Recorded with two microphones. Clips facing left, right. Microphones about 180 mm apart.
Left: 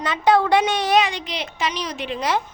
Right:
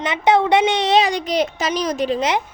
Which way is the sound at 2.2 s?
20° right (ahead or behind).